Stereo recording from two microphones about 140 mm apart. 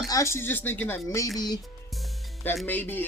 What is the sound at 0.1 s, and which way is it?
Speech, 20° left (ahead or behind).